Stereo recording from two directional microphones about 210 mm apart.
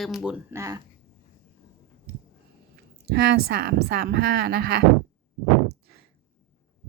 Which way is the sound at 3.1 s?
45° right (ahead or behind).